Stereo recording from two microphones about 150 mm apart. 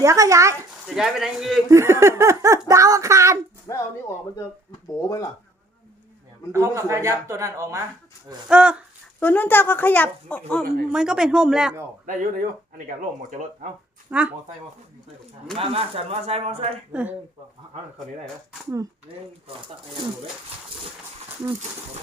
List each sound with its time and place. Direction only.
0.0 s speech: 20° right (ahead or behind)
0.9 s speech: 5° right (ahead or behind)
1.7 s speech: 20° right (ahead or behind)
3.7 s speech: 25° left (ahead or behind)
4.9 s speech: 20° left (ahead or behind)
6.5 s speech: 20° right (ahead or behind)
8.4 s speech: 10° right (ahead or behind)
9.2 s speech: 10° left (ahead or behind)
10.8 s speech: 5° right (ahead or behind)
12.0 s speech: 65° right (ahead or behind)
14.1 s speech: 10° right (ahead or behind)
15.5 s speech: 40° right (ahead or behind)
16.9 s speech: 10° right (ahead or behind)